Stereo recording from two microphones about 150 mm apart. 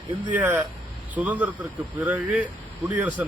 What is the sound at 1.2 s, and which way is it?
Speech, 10° right (ahead or behind).